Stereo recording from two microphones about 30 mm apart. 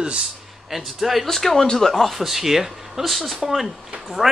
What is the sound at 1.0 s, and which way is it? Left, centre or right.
Speech, centre.